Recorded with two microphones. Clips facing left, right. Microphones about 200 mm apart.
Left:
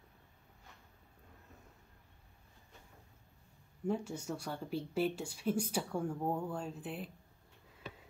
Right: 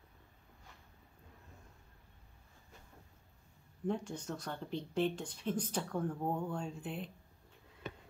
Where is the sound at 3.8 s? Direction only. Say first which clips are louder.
Left 1 dB; 5° left (ahead or behind).